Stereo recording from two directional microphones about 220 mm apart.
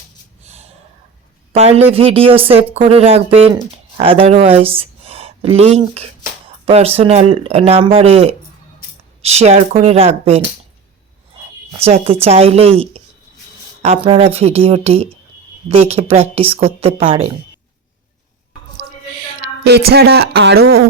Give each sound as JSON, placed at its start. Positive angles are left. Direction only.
{"t": 0.4, "sound": "a sound", "side_deg": -30}
{"t": 1.5, "sound": "speech", "side_deg": -30}
{"t": 11.8, "sound": "speech", "side_deg": -25}
{"t": 19.4, "sound": "speech", "side_deg": -50}